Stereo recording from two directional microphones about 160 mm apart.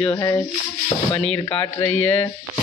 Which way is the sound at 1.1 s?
5° left (ahead or behind).